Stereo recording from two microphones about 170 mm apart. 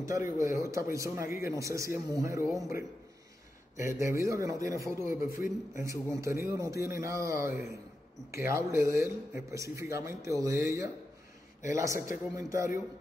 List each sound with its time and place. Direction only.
0.0 s speech: 20° right (ahead or behind)